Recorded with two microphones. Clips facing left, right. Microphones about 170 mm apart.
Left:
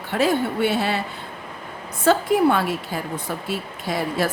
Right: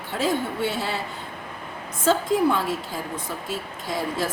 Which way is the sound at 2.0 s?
70° left (ahead or behind).